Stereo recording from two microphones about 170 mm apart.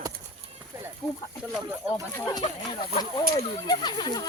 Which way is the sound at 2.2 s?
20° left (ahead or behind).